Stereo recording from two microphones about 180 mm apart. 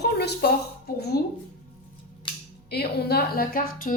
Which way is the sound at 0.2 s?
65° left (ahead or behind).